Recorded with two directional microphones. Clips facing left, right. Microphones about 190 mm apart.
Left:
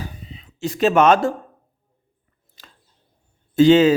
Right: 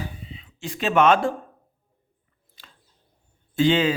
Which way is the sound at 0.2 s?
40° left (ahead or behind).